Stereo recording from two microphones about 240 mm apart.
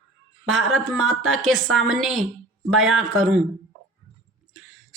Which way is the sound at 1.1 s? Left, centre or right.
Right.